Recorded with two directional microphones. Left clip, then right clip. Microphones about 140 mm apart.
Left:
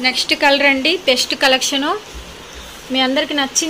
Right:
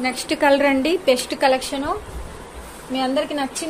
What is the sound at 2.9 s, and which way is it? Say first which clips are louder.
Speech: left 5 dB; 35° left (ahead or behind).